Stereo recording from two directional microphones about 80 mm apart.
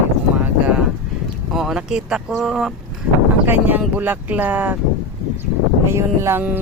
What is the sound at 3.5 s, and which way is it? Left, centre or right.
A woman's voice, right.